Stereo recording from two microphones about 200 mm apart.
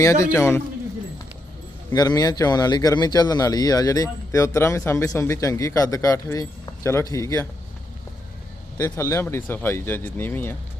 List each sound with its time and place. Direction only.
0.0 s speech: 15° left (ahead or behind)
1.9 s speech: 20° left (ahead or behind)
8.8 s speech: 15° left (ahead or behind)